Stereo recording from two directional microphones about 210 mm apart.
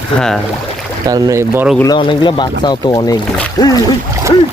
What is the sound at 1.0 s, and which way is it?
Speech, 15° right (ahead or behind).